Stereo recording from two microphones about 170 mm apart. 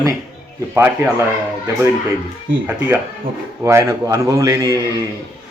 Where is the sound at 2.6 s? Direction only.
10° right (ahead or behind).